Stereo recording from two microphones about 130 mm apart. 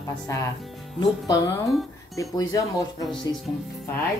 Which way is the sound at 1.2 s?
30° left (ahead or behind).